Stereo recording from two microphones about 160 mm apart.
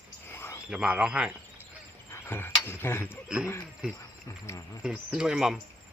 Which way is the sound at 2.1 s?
15° left (ahead or behind).